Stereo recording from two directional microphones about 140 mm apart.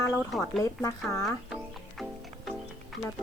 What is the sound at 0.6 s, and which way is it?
Speech, 20° left (ahead or behind).